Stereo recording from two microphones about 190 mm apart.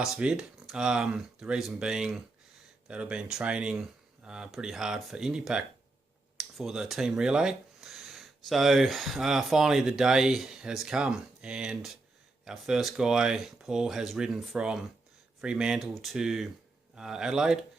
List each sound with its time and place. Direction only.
0.0 s speech: 5° right (ahead or behind)